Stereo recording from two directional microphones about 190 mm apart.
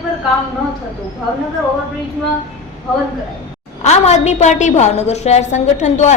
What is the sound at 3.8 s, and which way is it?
A woman's voice, 35° left (ahead or behind).